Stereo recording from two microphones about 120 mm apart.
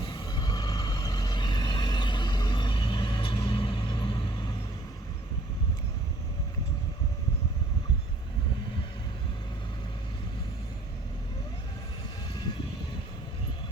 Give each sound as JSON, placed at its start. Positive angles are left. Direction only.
{"t": 0.0, "sound": "vehicle", "side_deg": 50}